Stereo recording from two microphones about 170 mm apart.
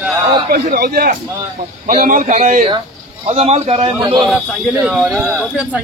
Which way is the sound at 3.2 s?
35° right (ahead or behind).